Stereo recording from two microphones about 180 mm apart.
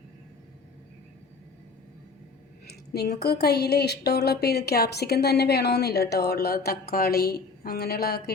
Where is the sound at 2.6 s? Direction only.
60° left (ahead or behind).